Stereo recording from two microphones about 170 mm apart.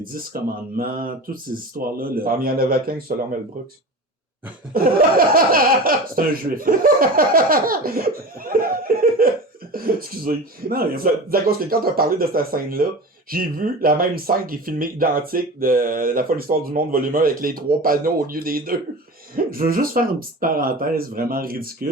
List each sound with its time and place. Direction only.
0.8 s speech: 55° right (ahead or behind)
4.7 s speech: 60° right (ahead or behind)